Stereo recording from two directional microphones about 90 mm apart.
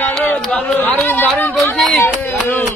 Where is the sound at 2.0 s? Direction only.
20° left (ahead or behind).